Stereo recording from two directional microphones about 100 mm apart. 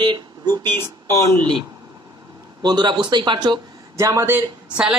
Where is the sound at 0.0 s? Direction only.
45° right (ahead or behind).